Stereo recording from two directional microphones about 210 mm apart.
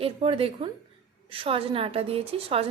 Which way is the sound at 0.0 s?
25° right (ahead or behind).